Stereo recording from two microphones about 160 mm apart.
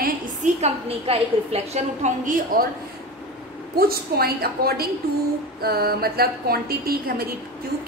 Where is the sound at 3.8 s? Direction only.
75° right (ahead or behind).